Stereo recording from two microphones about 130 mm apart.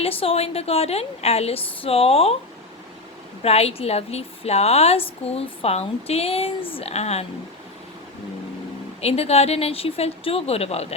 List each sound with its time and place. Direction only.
0.0 s a woman's voice: 50° left (ahead or behind)
3.4 s a woman's voice: 50° left (ahead or behind)
9.0 s a woman's voice: 50° left (ahead or behind)